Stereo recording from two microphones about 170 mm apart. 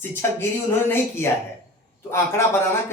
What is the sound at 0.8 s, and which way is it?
Speech, 15° left (ahead or behind).